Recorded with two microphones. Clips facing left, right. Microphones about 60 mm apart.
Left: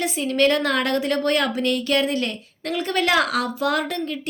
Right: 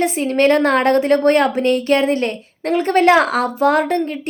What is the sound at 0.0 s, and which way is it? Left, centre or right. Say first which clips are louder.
A woman's voice: right 5 dB; right.